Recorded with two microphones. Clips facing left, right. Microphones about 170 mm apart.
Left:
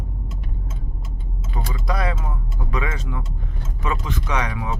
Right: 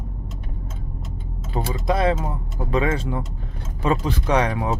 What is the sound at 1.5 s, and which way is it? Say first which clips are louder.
Speech: right 5 dB; 30° right (ahead or behind).